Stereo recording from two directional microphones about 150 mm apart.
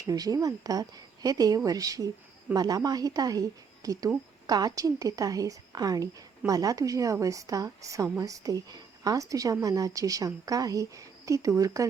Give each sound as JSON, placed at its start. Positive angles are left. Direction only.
{"t": 0.1, "sound": "a woman's voice", "side_deg": -25}